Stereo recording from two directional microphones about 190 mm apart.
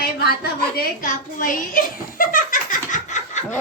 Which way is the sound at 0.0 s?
55° left (ahead or behind).